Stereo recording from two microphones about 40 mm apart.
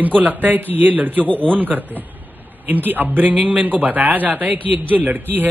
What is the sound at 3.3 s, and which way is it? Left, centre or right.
A man's voice, right.